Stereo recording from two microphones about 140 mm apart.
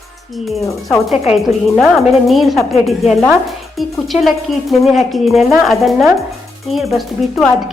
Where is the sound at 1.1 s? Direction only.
50° left (ahead or behind).